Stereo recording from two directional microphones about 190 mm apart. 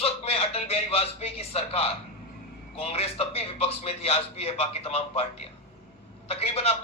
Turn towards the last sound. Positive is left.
turn(degrees=30)  # may be behind; listen again after turning